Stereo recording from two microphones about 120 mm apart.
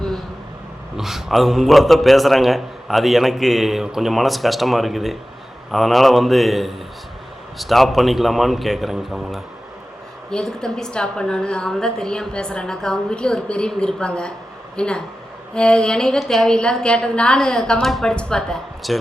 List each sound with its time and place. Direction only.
0.9 s a man's voice: centre (ahead or behind)